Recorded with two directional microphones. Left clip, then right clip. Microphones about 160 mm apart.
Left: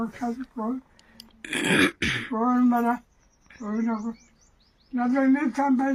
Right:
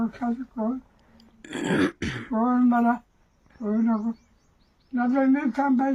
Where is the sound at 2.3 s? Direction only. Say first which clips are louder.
Right 2 dB; 20° right (ahead or behind).